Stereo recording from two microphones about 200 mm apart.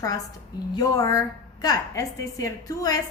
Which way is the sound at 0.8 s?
15° left (ahead or behind).